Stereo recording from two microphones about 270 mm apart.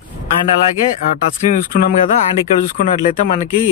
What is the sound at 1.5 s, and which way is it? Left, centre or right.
Speech, left.